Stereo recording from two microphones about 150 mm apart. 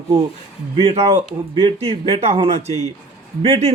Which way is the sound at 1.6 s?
40° right (ahead or behind).